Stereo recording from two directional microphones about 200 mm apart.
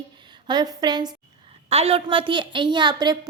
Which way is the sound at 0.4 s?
20° right (ahead or behind).